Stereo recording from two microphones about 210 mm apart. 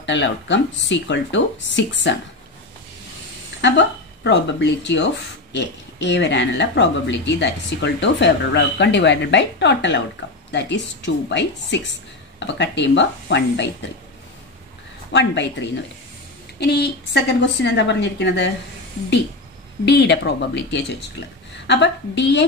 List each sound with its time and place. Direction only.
0.0 s speech: 60° left (ahead or behind)
3.6 s a woman's voice: 55° left (ahead or behind)
11.2 s speech: 55° left (ahead or behind)
15.1 s speech: 55° left (ahead or behind)
19.8 s speech: 55° left (ahead or behind)